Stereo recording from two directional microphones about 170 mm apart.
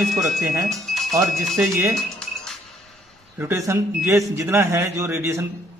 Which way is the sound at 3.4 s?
15° right (ahead or behind).